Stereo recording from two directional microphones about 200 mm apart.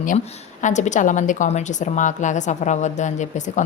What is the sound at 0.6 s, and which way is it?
A woman's voice, 35° left (ahead or behind).